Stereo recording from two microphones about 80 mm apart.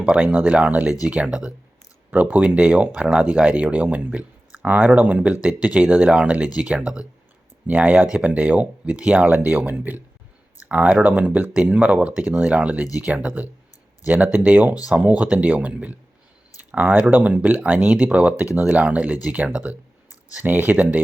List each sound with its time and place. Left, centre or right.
0.0 s speech: centre